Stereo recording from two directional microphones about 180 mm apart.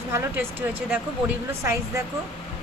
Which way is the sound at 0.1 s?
10° right (ahead or behind).